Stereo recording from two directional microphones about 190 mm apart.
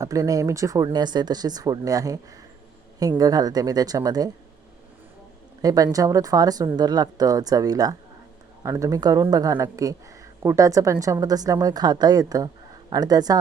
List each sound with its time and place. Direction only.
0.0 s a man's voice: 15° right (ahead or behind)
5.6 s a man's voice: 20° right (ahead or behind)